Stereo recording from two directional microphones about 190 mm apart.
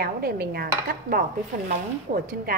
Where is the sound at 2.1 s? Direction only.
45° right (ahead or behind).